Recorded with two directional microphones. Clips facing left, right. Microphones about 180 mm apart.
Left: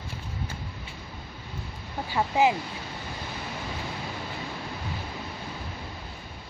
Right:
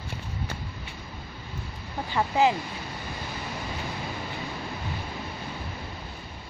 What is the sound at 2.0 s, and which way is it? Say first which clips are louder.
Speech: even; 10° left (ahead or behind).